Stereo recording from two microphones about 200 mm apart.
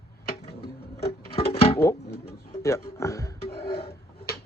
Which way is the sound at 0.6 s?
55° left (ahead or behind).